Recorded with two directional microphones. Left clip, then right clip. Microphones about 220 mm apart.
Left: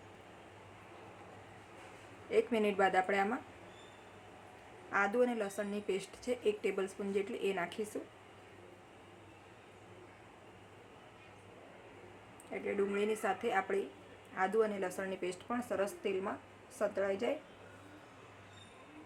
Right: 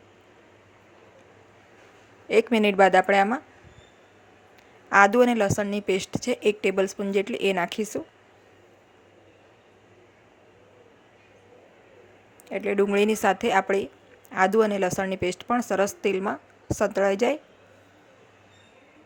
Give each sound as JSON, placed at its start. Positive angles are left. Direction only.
{"t": 2.3, "sound": "a woman's voice", "side_deg": -40}
{"t": 4.9, "sound": "a woman's voice", "side_deg": -45}
{"t": 12.5, "sound": "speech", "side_deg": -45}